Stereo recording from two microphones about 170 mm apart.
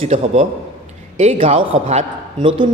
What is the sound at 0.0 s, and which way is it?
Speech, 35° right (ahead or behind).